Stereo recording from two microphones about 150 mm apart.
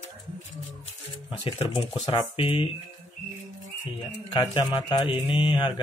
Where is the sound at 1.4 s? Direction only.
40° left (ahead or behind).